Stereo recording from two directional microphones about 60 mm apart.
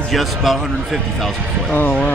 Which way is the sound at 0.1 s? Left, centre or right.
Centre.